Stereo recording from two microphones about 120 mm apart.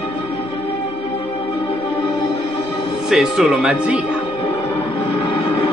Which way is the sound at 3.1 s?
5° right (ahead or behind).